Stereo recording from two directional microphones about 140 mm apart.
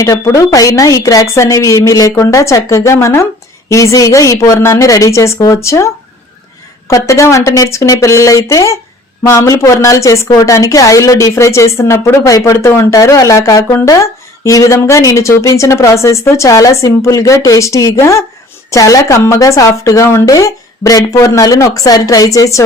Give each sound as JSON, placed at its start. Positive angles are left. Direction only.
{"t": 0.0, "sound": "a woman's voice", "side_deg": 25}